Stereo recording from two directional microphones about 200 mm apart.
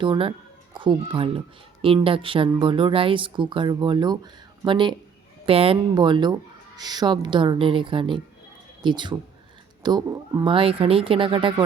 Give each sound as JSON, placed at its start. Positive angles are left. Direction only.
{"t": 0.0, "sound": "speech", "side_deg": -25}